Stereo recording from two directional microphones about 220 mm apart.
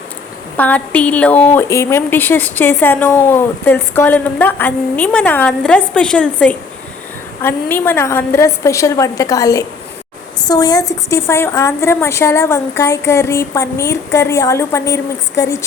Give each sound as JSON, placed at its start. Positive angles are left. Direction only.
{"t": 0.5, "sound": "a woman's voice", "side_deg": 5}